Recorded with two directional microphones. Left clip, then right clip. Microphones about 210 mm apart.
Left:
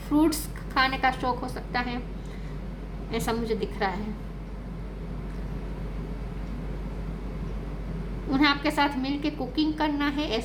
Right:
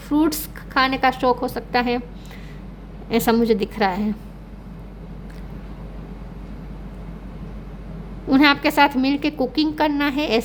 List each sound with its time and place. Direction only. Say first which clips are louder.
0.1 s a woman's voice: right 4 dB; 45° right (ahead or behind)
3.1 s a woman's voice: right 11 dB; 50° right (ahead or behind)
8.3 s a woman's voice: right 8 dB; 50° right (ahead or behind)